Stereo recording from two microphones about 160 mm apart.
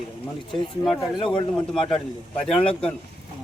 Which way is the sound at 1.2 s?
30° left (ahead or behind).